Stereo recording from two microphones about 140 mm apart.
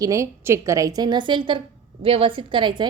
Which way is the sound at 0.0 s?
20° right (ahead or behind).